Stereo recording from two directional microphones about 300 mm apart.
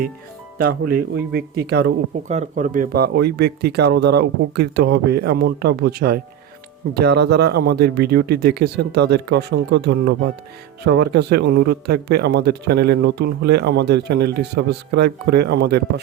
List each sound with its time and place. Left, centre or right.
0.6 s speech: right